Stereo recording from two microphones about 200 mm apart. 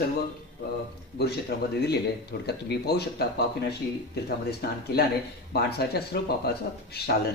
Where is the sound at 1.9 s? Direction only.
55° left (ahead or behind).